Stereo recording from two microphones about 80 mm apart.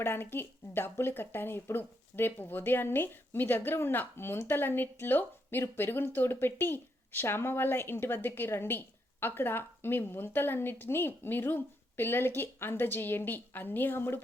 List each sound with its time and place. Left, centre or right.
0.0 s speech: left